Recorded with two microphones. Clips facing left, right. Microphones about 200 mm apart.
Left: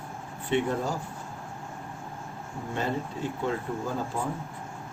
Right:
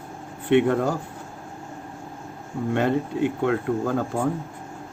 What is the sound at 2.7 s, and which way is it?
Speech, 65° right (ahead or behind).